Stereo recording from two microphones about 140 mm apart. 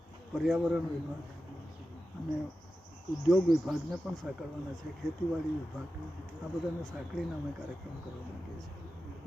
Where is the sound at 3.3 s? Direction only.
Centre (ahead or behind).